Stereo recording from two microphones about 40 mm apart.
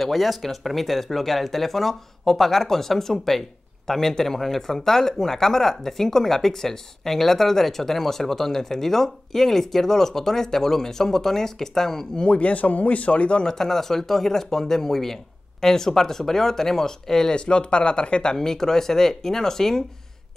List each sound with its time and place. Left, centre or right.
0.0 s speech: centre
12.3 s a man's voice: left
13.4 s speech: centre
17.4 s speech: left; by 19.8 s centre